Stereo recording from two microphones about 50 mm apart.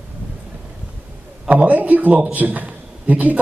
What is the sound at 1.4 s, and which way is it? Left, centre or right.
A man's voice, right.